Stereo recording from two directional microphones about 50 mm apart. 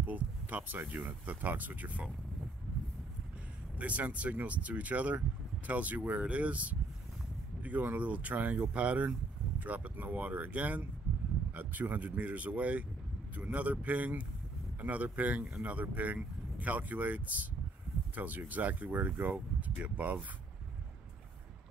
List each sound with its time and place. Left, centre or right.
0.0 s speech: right
3.7 s speech: right